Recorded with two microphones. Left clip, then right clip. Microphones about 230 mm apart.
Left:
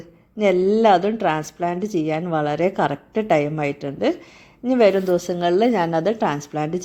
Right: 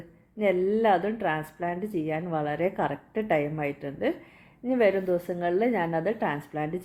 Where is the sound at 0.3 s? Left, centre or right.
Left.